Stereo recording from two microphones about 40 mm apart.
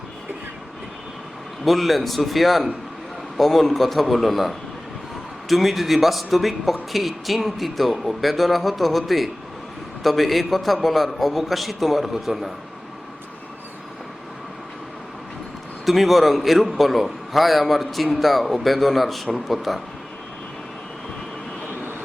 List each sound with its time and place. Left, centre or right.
1.6 s a man's voice: centre
15.9 s a man's voice: centre